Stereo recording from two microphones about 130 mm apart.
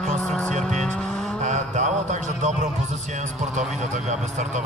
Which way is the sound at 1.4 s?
70° right (ahead or behind).